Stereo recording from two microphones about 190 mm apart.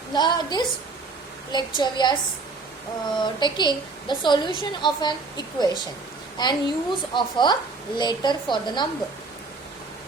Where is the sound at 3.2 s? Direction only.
25° left (ahead or behind).